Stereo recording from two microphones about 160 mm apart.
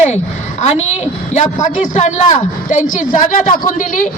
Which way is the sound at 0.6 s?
45° left (ahead or behind).